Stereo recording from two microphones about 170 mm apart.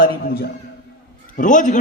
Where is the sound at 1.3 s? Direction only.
50° left (ahead or behind).